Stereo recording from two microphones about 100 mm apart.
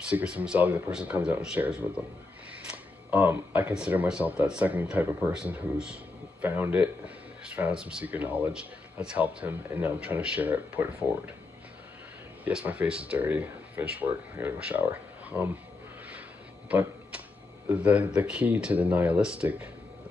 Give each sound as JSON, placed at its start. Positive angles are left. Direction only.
{"t": 0.1, "sound": "a man's voice", "side_deg": -10}
{"t": 12.4, "sound": "speech", "side_deg": -15}
{"t": 16.6, "sound": "a sound", "side_deg": -15}
{"t": 17.6, "sound": "speech", "side_deg": -15}